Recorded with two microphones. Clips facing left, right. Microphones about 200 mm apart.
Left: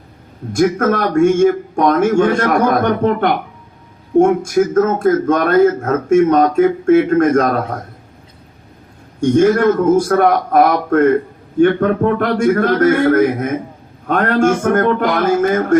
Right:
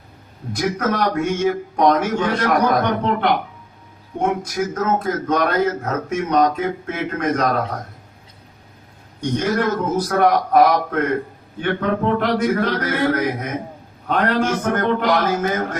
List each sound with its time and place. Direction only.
0.5 s a man's voice: 50° left (ahead or behind)
9.3 s a man's voice: 50° left (ahead or behind)